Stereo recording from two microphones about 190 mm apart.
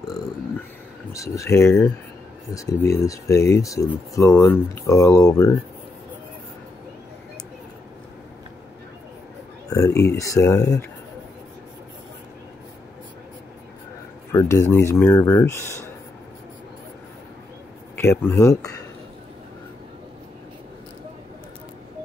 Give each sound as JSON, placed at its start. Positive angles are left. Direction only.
{"t": 1.1, "sound": "speech", "side_deg": 15}
{"t": 9.7, "sound": "speech", "side_deg": 15}
{"t": 14.3, "sound": "speech", "side_deg": 15}
{"t": 17.9, "sound": "speech", "side_deg": 10}